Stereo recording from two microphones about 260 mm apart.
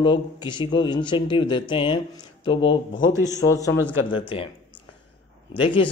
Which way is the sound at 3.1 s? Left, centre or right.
Centre.